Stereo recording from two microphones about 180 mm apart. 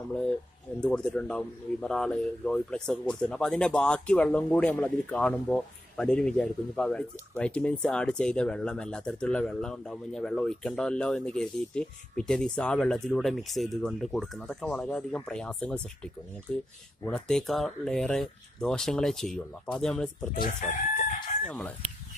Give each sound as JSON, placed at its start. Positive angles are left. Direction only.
{"t": 0.7, "sound": "speech", "side_deg": 5}
{"t": 20.6, "sound": "crowing", "side_deg": 45}
{"t": 21.5, "sound": "speech", "side_deg": 5}